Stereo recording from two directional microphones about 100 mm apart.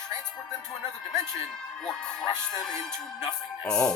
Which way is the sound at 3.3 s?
10° left (ahead or behind).